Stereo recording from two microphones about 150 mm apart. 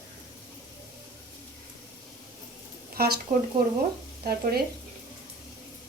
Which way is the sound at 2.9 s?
90° right.